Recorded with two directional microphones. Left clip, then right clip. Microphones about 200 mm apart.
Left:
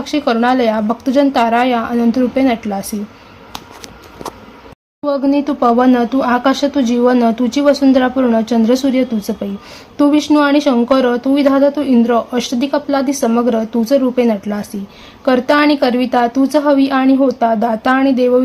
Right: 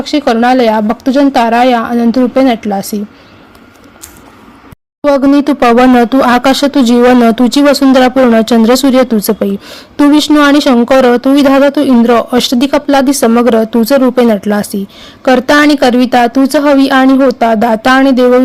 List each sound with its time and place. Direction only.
0.0 s speech: 25° right (ahead or behind)
5.0 s speech: 40° right (ahead or behind)